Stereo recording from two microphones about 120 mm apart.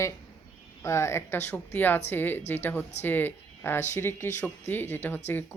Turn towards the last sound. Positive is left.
turn(degrees=15)  # may be behind; listen again after turning